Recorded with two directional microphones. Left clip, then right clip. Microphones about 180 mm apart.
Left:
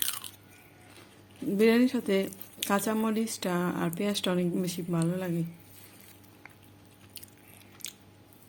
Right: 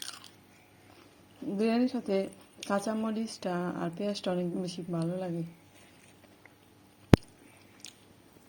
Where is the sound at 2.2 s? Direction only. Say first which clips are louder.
Left 3 dB; 20° left (ahead or behind).